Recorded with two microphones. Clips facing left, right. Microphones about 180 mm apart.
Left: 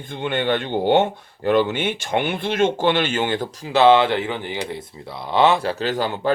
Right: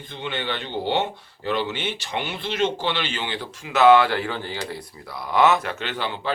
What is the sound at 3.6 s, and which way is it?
Speech, 30° left (ahead or behind).